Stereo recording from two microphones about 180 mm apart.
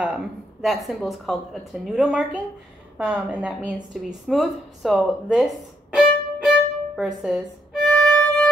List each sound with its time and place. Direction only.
0.0 s a sound: 5° right (ahead or behind)
0.8 s a woman's voice: centre (ahead or behind)
5.9 s violin: centre (ahead or behind)